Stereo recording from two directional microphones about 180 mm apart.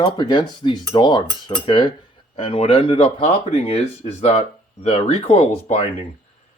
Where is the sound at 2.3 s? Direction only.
30° left (ahead or behind).